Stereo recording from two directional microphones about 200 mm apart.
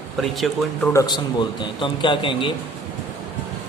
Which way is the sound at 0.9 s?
20° left (ahead or behind).